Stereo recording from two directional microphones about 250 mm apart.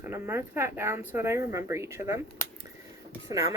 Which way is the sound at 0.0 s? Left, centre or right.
Centre.